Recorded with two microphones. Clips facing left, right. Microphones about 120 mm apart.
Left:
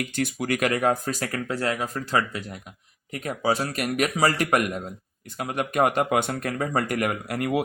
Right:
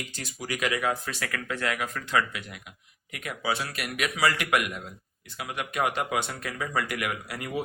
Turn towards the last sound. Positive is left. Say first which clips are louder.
# left 7 dB
turn(degrees=55)  # may be behind; listen again after turning